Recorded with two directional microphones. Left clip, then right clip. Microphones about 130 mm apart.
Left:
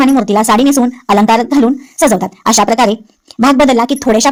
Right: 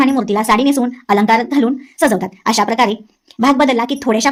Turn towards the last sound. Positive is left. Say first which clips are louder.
# left 5 dB
turn(degrees=40)  # may be behind; listen again after turning